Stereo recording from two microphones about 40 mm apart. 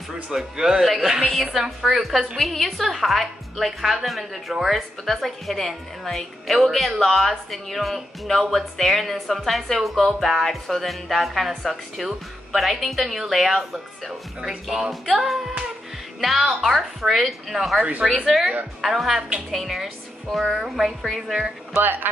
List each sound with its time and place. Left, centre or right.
0.1 s a woman's voice: centre
20.5 s speech: centre
21.7 s speech: right